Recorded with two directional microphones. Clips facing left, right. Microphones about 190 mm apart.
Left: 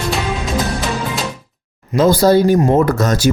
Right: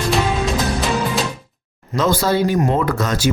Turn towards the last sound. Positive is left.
turn(degrees=40)  # may be behind; listen again after turning